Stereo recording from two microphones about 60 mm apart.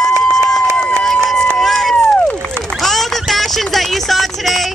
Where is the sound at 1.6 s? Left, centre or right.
Centre.